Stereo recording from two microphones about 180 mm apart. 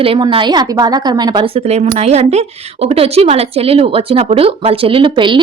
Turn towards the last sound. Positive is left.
turn(degrees=-25)  # may be behind; listen again after turning